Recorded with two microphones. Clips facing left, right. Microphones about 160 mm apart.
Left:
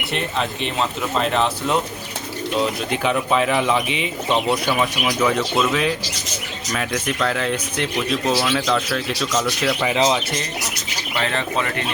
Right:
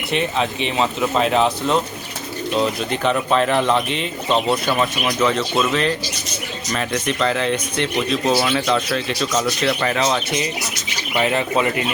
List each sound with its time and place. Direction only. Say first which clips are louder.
0.1 s speech: right 4 dB; centre (ahead or behind)
9.9 s speech: left 1 dB; 15° left (ahead or behind)
11.2 s speech: right 5 dB; 10° right (ahead or behind)